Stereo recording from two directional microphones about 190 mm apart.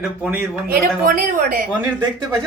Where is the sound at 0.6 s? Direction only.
50° right (ahead or behind).